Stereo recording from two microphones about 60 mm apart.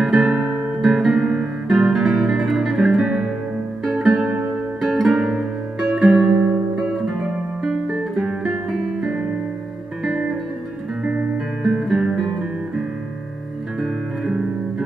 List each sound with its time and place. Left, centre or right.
0.0 s guitar: centre
3.8 s music: centre
11.1 s music: right
11.9 s music: centre
14.2 s music: centre